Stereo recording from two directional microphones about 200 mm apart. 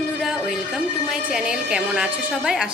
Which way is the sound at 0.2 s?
Centre (ahead or behind).